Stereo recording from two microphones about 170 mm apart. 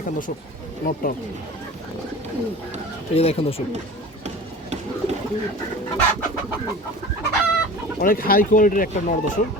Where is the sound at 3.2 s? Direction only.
35° left (ahead or behind).